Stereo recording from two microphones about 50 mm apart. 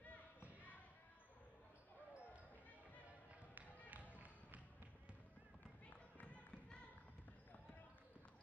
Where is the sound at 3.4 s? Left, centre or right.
Right.